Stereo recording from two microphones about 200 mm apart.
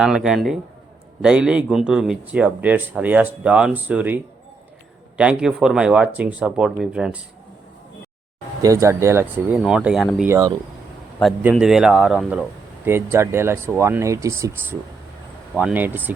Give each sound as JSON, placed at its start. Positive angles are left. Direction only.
{"t": 0.0, "sound": "a man's voice", "side_deg": -5}
{"t": 8.6, "sound": "a man's voice", "side_deg": -15}
{"t": 10.2, "sound": "a man's voice", "side_deg": -15}
{"t": 11.2, "sound": "a man's voice", "side_deg": 0}